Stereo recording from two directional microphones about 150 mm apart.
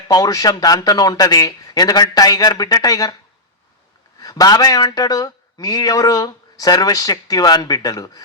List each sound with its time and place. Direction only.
0.1 s speech: 25° left (ahead or behind)
4.2 s speech: 25° left (ahead or behind)